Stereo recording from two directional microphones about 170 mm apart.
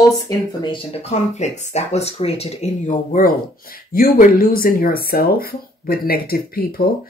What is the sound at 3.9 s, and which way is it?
Speech, 60° left (ahead or behind).